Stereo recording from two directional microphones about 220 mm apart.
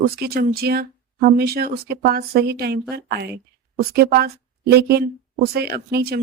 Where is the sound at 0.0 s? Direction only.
45° right (ahead or behind).